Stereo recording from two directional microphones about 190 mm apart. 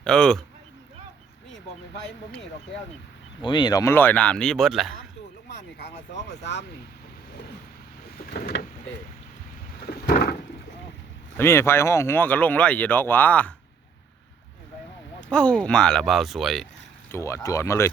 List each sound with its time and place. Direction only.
0.0 s speech: 5° left (ahead or behind)
3.4 s speech: 25° left (ahead or behind); by 4.9 s centre (ahead or behind)
5.5 s speech: 60° left (ahead or behind)
8.5 s speech: 70° left (ahead or behind)
9.8 s a sound: 55° left (ahead or behind)
11.3 s speech: 15° left (ahead or behind)
15.3 s speech: 5° left (ahead or behind)
17.1 s speech: 15° left (ahead or behind)